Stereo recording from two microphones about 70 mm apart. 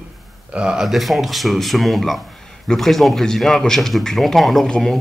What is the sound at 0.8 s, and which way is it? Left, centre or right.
Speech, centre.